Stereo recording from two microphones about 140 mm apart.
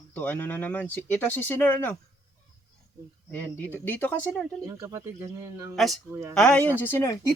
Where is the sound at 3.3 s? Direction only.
10° left (ahead or behind).